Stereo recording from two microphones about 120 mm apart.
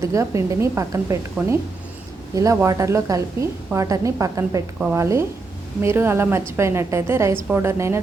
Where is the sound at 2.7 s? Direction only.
30° right (ahead or behind).